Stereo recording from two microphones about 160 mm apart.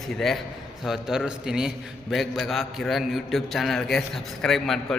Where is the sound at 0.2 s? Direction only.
Centre (ahead or behind).